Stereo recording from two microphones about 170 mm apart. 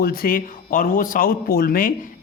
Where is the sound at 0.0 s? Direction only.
60° left (ahead or behind).